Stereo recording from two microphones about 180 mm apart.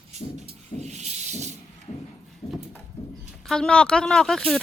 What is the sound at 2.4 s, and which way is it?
Clip-clop, 35° left (ahead or behind).